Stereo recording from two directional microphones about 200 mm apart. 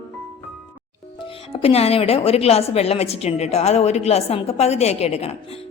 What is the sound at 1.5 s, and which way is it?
A woman's voice, 30° left (ahead or behind).